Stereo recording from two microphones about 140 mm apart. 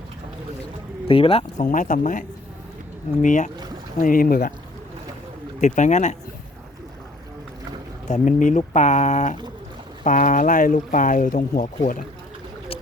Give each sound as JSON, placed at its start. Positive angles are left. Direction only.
{"t": 1.0, "sound": "speech", "side_deg": 40}
{"t": 1.5, "sound": "speech", "side_deg": 65}
{"t": 4.0, "sound": "speech", "side_deg": 85}
{"t": 5.5, "sound": "speech", "side_deg": 60}
{"t": 8.0, "sound": "speech", "side_deg": 60}